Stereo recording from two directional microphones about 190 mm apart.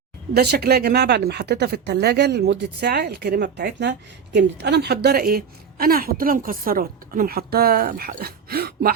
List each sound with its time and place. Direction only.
0.3 s a woman's voice: 55° right (ahead or behind)